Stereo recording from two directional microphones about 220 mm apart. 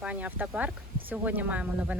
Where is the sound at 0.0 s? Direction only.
5° right (ahead or behind).